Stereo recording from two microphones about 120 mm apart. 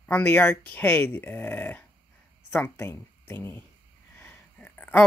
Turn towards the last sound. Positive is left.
turn(degrees=10)  # may be behind; listen again after turning